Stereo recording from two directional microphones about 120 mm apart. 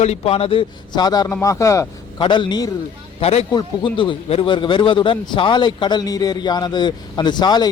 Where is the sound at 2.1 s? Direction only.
45° left (ahead or behind).